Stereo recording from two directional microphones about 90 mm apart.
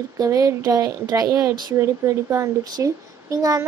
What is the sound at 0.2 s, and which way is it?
Speech, 35° right (ahead or behind).